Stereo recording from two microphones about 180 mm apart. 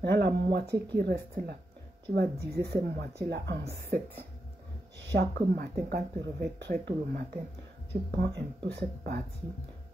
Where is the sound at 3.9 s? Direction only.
55° right (ahead or behind).